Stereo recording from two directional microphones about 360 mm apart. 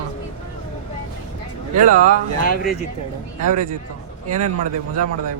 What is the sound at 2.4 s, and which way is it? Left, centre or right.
Speech, left.